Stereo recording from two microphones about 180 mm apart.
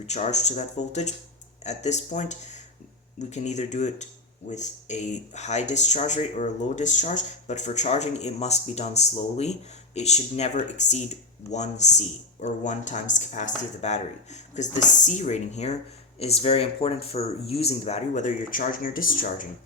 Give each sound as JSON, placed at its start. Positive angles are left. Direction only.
{"t": 0.0, "sound": "speech", "side_deg": 40}